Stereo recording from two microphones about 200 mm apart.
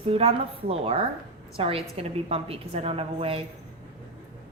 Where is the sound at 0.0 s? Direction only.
30° right (ahead or behind).